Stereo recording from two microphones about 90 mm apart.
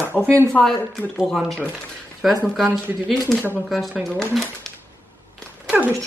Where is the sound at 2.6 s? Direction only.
10° right (ahead or behind); by 4.7 s 5° left (ahead or behind).